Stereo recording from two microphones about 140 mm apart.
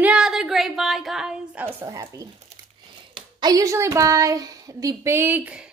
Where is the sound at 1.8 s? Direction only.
25° right (ahead or behind).